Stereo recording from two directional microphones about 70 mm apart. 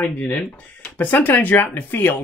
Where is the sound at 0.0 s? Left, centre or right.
Left.